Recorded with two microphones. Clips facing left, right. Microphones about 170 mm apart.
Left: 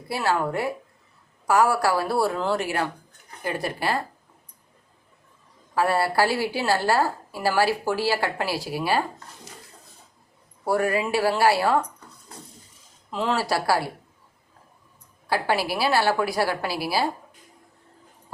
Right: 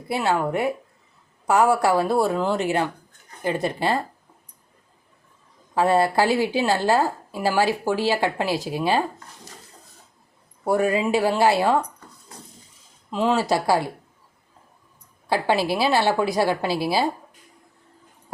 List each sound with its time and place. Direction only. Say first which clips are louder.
0.1 s a woman's voice: right 2 dB; 20° right (ahead or behind)
5.7 s a woman's voice: right 3 dB; 20° right (ahead or behind)
10.6 s a woman's voice: right 2 dB; 20° right (ahead or behind)
13.1 s a woman's voice: right 4 dB; 20° right (ahead or behind)
15.3 s a woman's voice: right 3 dB; 25° right (ahead or behind)